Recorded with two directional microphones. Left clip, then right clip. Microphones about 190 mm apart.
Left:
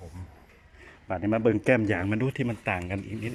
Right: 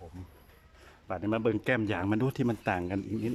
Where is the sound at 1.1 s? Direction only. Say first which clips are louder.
Left 5 dB; 5° right (ahead or behind).